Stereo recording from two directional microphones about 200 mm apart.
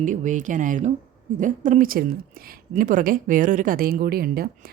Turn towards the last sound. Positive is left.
turn(degrees=-50)  # may be behind; listen again after turning